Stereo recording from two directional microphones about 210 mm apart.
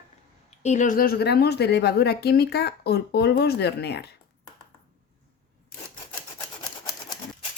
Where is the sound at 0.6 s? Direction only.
35° left (ahead or behind); by 4.1 s 50° left (ahead or behind).